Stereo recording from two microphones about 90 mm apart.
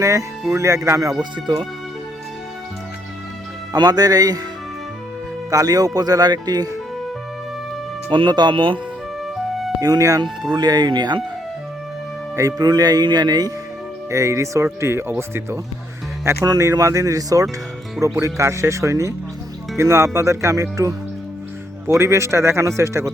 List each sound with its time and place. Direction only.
0.0 s speech: 35° right (ahead or behind)
1.2 s speech: 55° right (ahead or behind)
3.7 s speech: 45° right (ahead or behind)
5.5 s speech: 40° right (ahead or behind)
8.1 s speech: 60° right (ahead or behind)
9.8 s speech: 40° right (ahead or behind)
12.4 s speech: 40° right (ahead or behind)
14.1 s speech: 35° right (ahead or behind)